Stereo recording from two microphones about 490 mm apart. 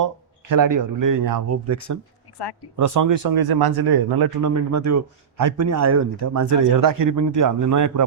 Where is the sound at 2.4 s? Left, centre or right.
Left.